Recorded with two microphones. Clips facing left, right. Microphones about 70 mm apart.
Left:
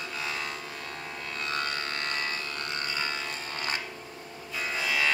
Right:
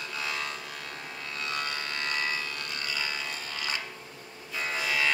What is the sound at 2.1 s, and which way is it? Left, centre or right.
Music, left.